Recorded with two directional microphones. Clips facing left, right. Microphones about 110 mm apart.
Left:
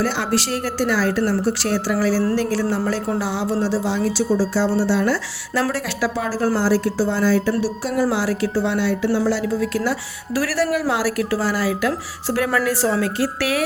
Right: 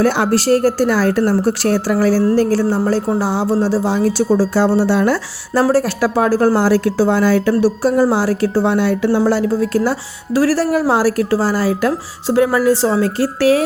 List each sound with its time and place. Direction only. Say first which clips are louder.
0.0 s a woman's voice: right 7 dB; 50° right (ahead or behind)
6.1 s a woman's voice: right 9 dB; 55° right (ahead or behind)
7.8 s a woman's voice: right 6 dB; 40° right (ahead or behind)
12.3 s speech: right 7 dB; 25° right (ahead or behind)